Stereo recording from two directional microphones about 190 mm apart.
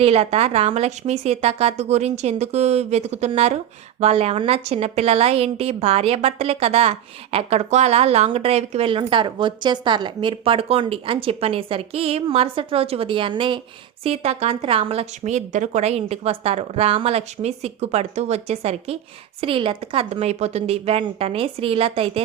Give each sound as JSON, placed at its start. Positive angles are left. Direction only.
{"t": 0.0, "sound": "a woman's voice", "side_deg": -30}